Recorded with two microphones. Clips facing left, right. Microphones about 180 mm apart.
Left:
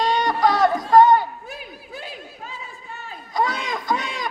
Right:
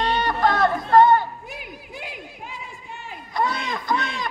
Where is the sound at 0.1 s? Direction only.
15° left (ahead or behind).